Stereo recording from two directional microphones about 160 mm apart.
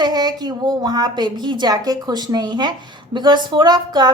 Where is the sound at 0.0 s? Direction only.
25° right (ahead or behind).